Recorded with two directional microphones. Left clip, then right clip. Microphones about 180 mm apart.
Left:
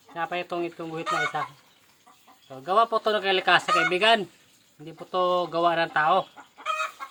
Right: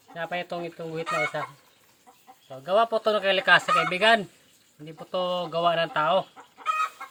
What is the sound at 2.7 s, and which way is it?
Speech, 25° left (ahead or behind).